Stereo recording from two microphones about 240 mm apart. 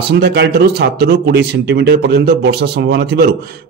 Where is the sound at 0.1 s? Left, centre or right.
Right.